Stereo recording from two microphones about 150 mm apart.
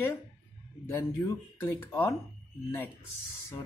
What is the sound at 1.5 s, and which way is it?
Speech, 15° left (ahead or behind).